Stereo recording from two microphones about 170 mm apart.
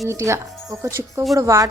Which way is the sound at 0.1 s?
15° right (ahead or behind).